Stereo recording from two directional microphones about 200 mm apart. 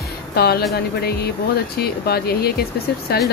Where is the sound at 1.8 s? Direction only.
50° left (ahead or behind).